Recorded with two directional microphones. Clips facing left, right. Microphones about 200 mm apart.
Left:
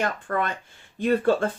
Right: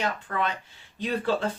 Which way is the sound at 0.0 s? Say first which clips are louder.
Left 2 dB; 50° left (ahead or behind).